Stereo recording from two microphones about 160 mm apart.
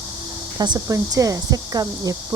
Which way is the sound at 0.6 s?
25° right (ahead or behind).